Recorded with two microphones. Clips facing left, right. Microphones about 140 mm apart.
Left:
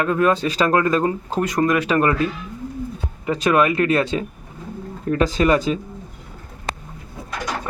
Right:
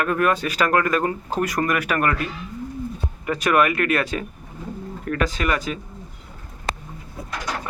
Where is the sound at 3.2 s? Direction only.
20° left (ahead or behind).